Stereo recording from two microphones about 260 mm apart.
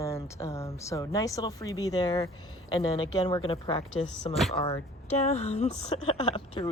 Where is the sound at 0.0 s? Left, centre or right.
Centre.